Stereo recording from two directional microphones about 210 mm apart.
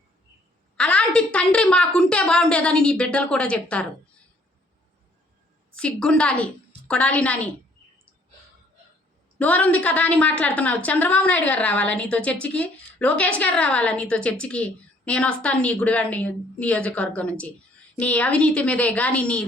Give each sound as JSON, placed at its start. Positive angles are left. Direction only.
{"t": 0.8, "sound": "a woman's voice", "side_deg": 5}
{"t": 5.7, "sound": "a woman's voice", "side_deg": 5}
{"t": 9.4, "sound": "a woman's voice", "side_deg": 5}